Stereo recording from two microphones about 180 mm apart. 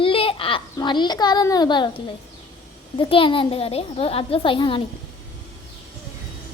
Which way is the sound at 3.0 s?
30° left (ahead or behind).